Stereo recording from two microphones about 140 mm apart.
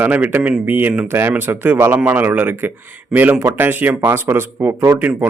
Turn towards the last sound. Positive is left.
turn(degrees=-10)  # may be behind; listen again after turning